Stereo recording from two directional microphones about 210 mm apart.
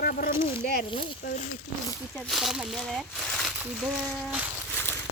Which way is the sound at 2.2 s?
Centre (ahead or behind).